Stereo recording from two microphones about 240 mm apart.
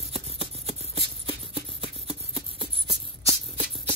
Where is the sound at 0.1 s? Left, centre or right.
Right.